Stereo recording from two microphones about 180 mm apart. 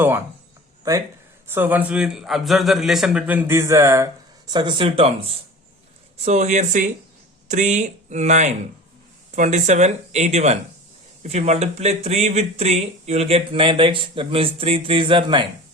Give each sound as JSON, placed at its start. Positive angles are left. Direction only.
{"t": 1.5, "sound": "a man's voice", "side_deg": -10}